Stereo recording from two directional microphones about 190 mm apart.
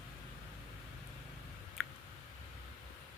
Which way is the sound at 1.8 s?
Centre (ahead or behind).